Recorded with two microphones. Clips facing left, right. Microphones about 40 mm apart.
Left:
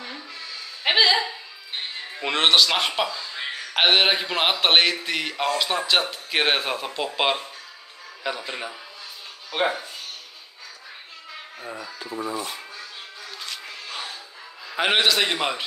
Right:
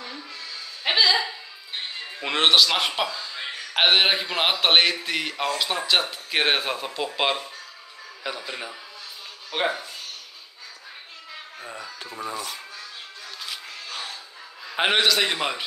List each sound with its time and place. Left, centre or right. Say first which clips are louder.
0.8 s music: left 2 dB; centre
2.2 s a man's voice: even; centre
11.6 s a man's voice: left 2 dB; centre
12.1 s speech: left 3 dB; left
14.9 s a man's voice: left 1 dB; centre